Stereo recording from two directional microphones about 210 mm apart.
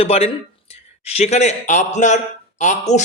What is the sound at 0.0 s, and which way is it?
A man's voice, 30° left (ahead or behind).